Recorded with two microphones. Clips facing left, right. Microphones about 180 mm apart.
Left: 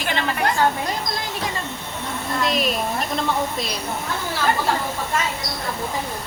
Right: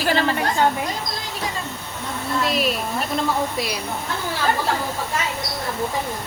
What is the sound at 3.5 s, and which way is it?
Speech, 10° right (ahead or behind).